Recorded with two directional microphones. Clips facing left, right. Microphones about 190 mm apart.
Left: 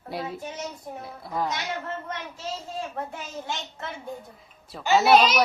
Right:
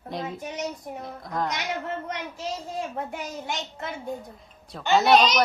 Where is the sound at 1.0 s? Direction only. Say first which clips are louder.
Even; 5° left (ahead or behind).